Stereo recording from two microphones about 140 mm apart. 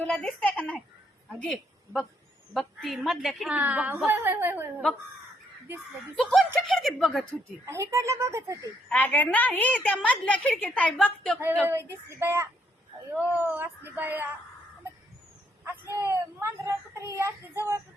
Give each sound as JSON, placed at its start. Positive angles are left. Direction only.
{"t": 0.0, "sound": "a woman's voice", "side_deg": 5}
{"t": 3.6, "sound": "speech", "side_deg": -10}
{"t": 6.1, "sound": "a woman's voice", "side_deg": 0}
{"t": 7.6, "sound": "speech", "side_deg": -20}
{"t": 8.9, "sound": "a woman's voice", "side_deg": 10}
{"t": 11.6, "sound": "speech", "side_deg": -15}
{"t": 15.6, "sound": "speech", "side_deg": -15}